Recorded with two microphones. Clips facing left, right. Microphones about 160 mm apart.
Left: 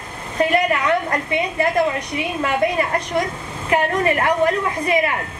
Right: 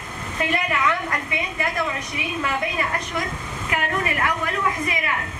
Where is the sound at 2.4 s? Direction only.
35° left (ahead or behind).